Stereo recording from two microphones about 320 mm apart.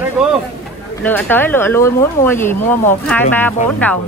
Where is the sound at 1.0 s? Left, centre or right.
Centre.